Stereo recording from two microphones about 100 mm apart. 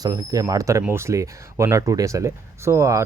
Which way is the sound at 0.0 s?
40° right (ahead or behind).